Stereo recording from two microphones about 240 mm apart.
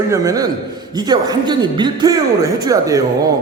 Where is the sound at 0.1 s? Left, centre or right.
Centre.